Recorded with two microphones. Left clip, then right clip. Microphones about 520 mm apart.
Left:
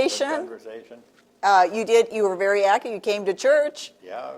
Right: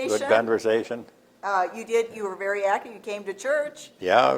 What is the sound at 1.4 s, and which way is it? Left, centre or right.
A woman's voice, left.